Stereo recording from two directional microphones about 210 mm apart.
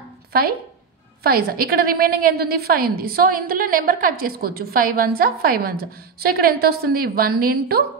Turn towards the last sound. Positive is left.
turn(degrees=-45)  # may be behind; listen again after turning